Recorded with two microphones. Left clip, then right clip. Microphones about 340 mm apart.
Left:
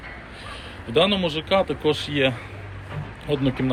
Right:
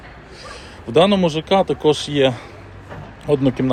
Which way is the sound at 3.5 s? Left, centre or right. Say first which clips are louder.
Right 5 dB; centre.